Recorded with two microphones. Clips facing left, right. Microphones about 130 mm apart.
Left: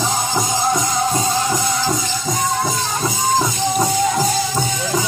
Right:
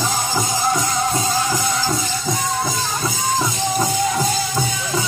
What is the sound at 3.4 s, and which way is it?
Music, 5° left (ahead or behind).